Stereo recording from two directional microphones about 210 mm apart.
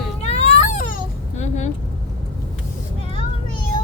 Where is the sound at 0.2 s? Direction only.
30° left (ahead or behind).